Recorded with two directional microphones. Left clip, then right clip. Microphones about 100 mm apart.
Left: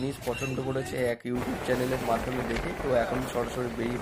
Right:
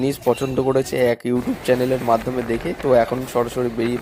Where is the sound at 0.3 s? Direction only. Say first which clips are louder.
Right 14 dB; 90° right.